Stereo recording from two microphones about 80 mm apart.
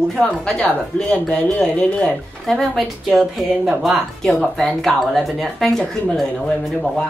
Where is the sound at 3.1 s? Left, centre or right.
Centre.